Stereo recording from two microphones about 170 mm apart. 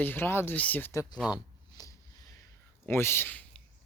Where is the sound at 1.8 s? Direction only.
20° left (ahead or behind).